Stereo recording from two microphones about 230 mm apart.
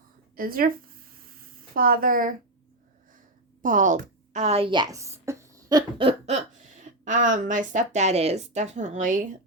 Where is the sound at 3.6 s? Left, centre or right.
Right.